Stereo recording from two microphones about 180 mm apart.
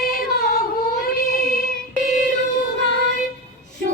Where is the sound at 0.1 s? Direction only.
55° left (ahead or behind).